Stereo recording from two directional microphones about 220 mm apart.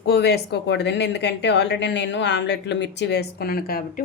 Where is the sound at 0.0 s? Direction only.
45° left (ahead or behind).